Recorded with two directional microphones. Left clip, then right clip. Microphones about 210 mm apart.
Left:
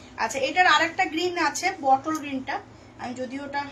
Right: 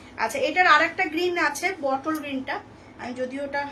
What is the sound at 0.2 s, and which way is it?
A woman's voice, 20° right (ahead or behind).